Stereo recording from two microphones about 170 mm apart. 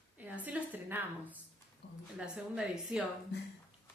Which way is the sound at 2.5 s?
5° right (ahead or behind).